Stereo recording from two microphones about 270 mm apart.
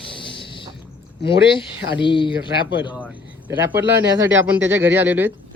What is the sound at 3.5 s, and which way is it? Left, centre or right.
Speech, centre.